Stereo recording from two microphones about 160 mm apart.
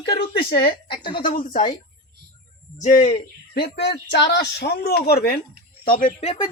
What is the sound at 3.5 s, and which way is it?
Speech, 90° left.